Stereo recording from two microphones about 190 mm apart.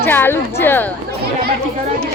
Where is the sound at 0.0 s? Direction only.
10° left (ahead or behind).